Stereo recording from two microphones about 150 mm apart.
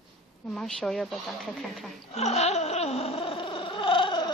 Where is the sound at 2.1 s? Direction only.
45° left (ahead or behind).